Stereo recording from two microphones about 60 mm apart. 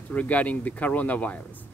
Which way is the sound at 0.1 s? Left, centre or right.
Left.